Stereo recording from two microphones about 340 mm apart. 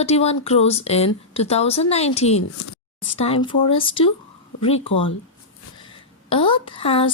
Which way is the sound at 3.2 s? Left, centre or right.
Centre.